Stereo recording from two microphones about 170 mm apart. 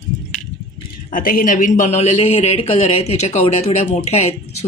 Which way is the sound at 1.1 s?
55° left (ahead or behind).